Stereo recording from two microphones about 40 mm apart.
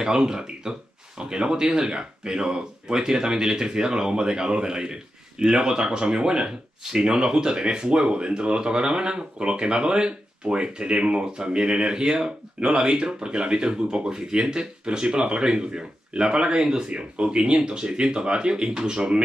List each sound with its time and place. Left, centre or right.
0.0 s speech: centre